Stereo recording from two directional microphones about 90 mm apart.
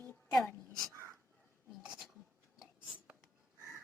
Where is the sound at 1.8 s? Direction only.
10° right (ahead or behind).